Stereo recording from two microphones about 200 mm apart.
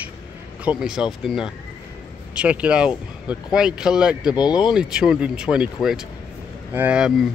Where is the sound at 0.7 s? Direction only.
5° right (ahead or behind).